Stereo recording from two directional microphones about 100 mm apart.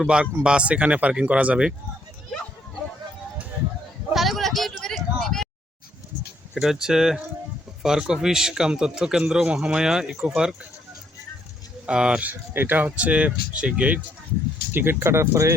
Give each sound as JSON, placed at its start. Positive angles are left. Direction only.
{"t": 0.0, "sound": "speech", "side_deg": -10}
{"t": 4.1, "sound": "a sound", "side_deg": 0}
{"t": 6.5, "sound": "speech", "side_deg": -5}
{"t": 11.9, "sound": "speech", "side_deg": -10}
{"t": 12.3, "sound": "speech", "side_deg": -20}